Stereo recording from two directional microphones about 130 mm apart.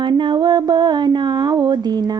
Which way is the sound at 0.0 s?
35° right (ahead or behind).